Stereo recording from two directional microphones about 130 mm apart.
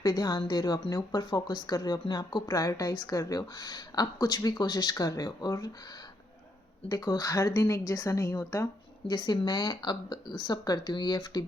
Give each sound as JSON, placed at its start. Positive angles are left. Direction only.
{"t": 0.0, "sound": "a woman's voice", "side_deg": 30}
{"t": 6.8, "sound": "a woman's voice", "side_deg": 30}